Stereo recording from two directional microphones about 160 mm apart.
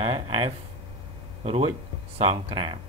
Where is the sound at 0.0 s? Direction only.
35° right (ahead or behind).